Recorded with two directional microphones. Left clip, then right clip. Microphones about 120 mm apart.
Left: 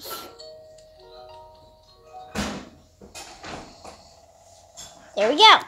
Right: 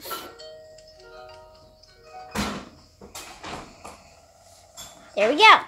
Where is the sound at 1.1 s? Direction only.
20° left (ahead or behind).